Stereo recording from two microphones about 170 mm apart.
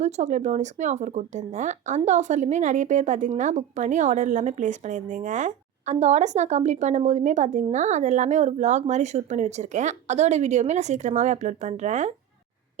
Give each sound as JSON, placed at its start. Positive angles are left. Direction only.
{"t": 0.0, "sound": "speech", "side_deg": -45}